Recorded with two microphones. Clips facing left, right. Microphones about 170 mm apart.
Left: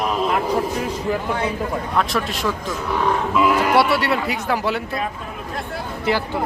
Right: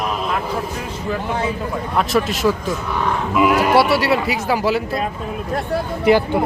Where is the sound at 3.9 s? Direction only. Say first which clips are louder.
Right 3 dB; centre (ahead or behind).